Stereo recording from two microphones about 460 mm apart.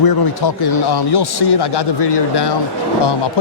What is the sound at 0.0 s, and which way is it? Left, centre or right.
A man's voice, left.